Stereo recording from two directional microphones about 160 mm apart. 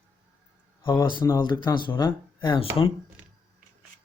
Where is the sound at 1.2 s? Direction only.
25° left (ahead or behind).